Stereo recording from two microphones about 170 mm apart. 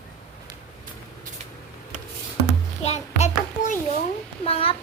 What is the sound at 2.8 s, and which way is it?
Child singing, 40° left (ahead or behind).